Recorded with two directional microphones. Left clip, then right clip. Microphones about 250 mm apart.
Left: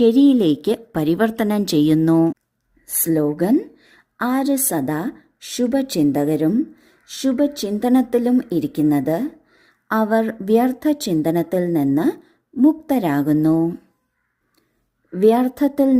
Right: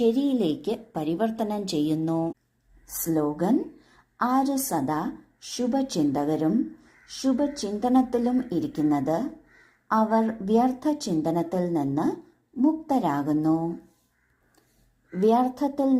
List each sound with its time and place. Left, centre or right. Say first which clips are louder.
0.0 s a woman's voice: left 9 dB; left
15.2 s a woman's voice: left 6 dB; left